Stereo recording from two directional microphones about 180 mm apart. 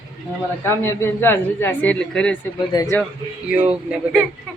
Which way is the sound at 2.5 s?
20° left (ahead or behind).